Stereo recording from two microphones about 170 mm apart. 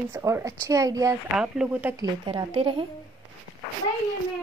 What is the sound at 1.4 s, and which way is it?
Speech, 5° right (ahead or behind).